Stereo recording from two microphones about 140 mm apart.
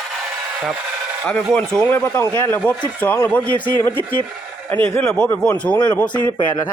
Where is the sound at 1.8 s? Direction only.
15° left (ahead or behind).